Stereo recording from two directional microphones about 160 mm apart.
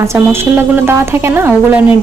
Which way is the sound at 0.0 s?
20° right (ahead or behind).